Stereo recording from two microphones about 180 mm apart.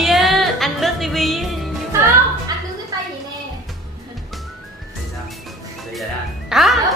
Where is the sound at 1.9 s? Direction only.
15° right (ahead or behind).